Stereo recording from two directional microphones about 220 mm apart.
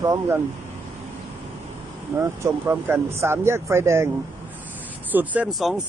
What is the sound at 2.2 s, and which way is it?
Speech, 10° right (ahead or behind).